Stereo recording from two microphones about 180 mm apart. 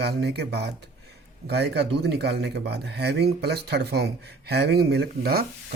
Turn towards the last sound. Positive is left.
turn(degrees=-60)  # may be behind; listen again after turning